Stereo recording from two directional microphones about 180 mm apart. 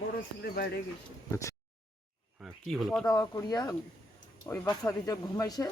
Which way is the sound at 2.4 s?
Centre (ahead or behind).